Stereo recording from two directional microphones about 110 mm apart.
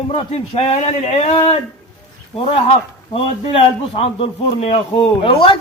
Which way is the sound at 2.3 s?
60° left (ahead or behind).